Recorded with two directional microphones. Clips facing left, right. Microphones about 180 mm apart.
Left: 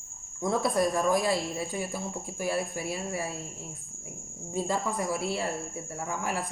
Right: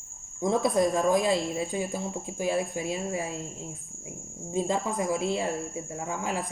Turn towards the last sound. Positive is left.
turn(degrees=-20)  # may be behind; listen again after turning